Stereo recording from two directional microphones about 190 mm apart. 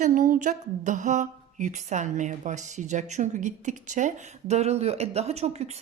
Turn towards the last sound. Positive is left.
turn(degrees=-35)  # may be behind; listen again after turning